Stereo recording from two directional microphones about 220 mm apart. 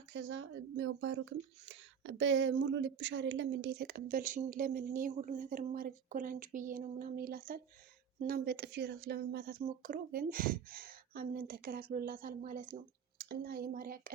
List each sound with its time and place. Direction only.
0.1 s speech: 55° right (ahead or behind); by 14.1 s 40° right (ahead or behind)